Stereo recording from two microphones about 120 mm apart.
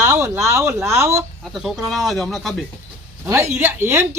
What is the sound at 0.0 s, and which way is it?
Speech, 25° right (ahead or behind).